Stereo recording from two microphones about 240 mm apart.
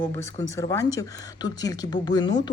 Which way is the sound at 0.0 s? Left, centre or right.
Centre.